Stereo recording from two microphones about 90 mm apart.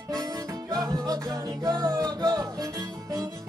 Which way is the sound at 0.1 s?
45° right (ahead or behind).